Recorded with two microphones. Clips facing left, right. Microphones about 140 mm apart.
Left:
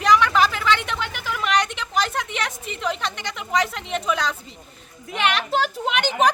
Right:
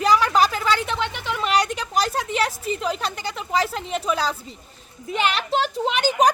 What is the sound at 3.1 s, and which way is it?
Speech, 35° right (ahead or behind).